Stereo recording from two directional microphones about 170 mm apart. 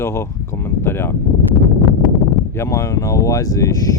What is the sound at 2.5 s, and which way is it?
Speech, 15° left (ahead or behind).